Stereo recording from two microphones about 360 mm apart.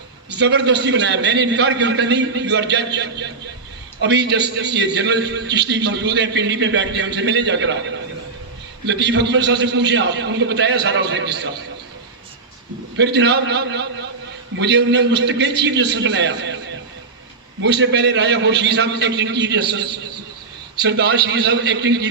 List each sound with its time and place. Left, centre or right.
0.3 s a man's voice: right
13.0 s a man's voice: right
17.6 s a man's voice: right